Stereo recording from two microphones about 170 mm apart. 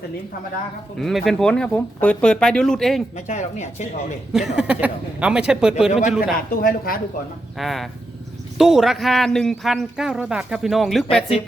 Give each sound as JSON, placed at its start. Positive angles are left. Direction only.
{"t": 0.9, "sound": "a man's voice", "side_deg": 0}
{"t": 3.2, "sound": "speech", "side_deg": 45}
{"t": 4.3, "sound": "a man's voice", "side_deg": 0}
{"t": 6.5, "sound": "speech", "side_deg": 60}
{"t": 7.6, "sound": "a man's voice", "side_deg": 0}